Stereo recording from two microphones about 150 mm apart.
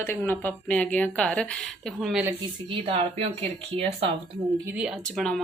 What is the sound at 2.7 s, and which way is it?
Speech, 40° right (ahead or behind).